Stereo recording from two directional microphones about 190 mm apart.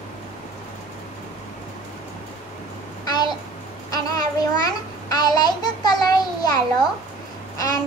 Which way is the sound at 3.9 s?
20° left (ahead or behind).